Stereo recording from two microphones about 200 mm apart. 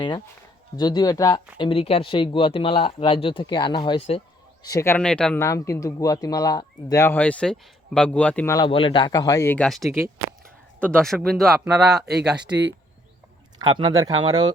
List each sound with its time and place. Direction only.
0.8 s speech: 20° left (ahead or behind)
4.6 s speech: 15° left (ahead or behind)
8.5 s speech: 25° left (ahead or behind); by 12.0 s 5° right (ahead or behind)
13.6 s speech: 20° right (ahead or behind)